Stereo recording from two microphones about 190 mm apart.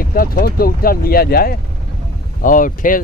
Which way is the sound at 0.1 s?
50° left (ahead or behind).